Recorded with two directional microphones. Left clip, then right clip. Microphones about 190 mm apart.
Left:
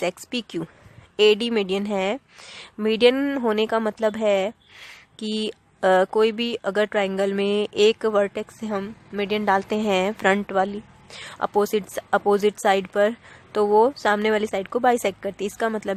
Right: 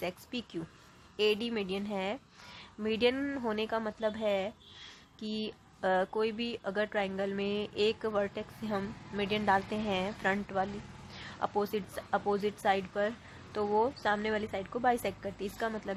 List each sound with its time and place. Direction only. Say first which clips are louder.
0.0 s speech: left 12 dB; 40° left (ahead or behind)